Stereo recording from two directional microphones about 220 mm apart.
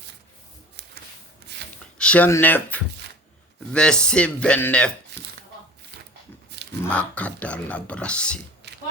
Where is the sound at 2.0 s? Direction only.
5° left (ahead or behind).